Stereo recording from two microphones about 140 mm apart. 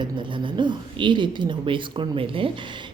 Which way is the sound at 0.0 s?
35° right (ahead or behind).